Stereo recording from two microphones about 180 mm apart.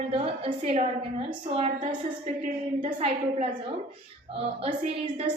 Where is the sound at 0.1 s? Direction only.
30° right (ahead or behind).